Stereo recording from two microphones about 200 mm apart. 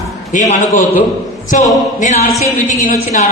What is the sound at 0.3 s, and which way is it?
Speech, 40° left (ahead or behind).